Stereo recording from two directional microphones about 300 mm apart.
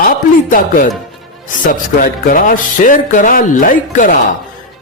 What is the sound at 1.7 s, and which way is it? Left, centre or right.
Speech, left.